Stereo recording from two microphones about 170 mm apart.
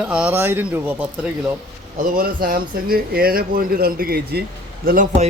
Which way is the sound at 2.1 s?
60° right (ahead or behind).